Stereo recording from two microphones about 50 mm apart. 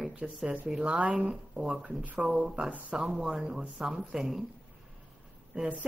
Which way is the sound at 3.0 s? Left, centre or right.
Centre.